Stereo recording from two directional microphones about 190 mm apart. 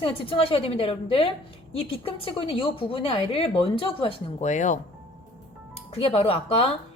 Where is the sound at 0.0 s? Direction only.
30° left (ahead or behind).